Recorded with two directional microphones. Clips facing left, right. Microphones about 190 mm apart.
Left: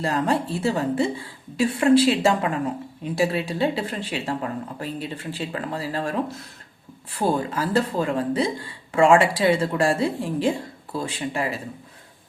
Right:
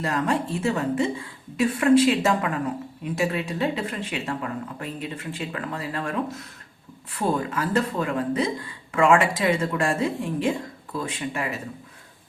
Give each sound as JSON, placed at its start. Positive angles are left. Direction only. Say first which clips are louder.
{"t": 0.0, "sound": "speech", "louder": "left 2 dB", "side_deg": 30}